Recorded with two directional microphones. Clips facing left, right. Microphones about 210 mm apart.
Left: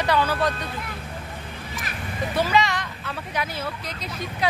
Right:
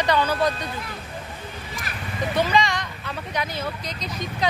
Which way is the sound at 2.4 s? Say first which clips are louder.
Even; 5° left (ahead or behind).